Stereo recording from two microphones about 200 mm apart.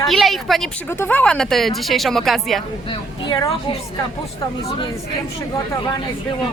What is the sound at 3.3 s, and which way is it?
Speech, 20° left (ahead or behind).